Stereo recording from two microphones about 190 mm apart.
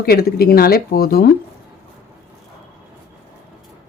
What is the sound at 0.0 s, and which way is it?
Speech, 55° left (ahead or behind).